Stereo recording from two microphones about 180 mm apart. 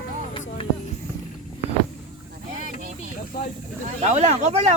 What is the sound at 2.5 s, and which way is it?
Snake, 45° right (ahead or behind).